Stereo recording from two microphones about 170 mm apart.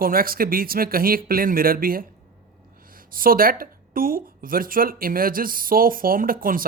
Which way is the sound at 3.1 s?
55° right (ahead or behind).